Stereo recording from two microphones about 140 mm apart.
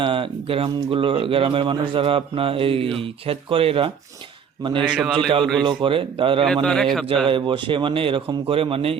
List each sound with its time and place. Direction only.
0.0 s speech: 40° right (ahead or behind)
4.9 s a man's voice: 5° right (ahead or behind)
5.6 s speech: 40° right (ahead or behind)
6.4 s a man's voice: 5° left (ahead or behind)
7.3 s speech: 35° right (ahead or behind)